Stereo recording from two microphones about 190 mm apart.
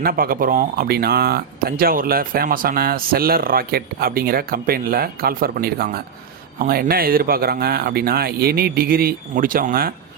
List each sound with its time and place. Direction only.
0.0 s speech: 50° right (ahead or behind)